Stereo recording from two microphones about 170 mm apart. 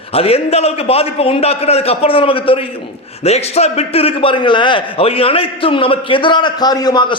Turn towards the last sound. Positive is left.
turn(degrees=25)  # may be behind; listen again after turning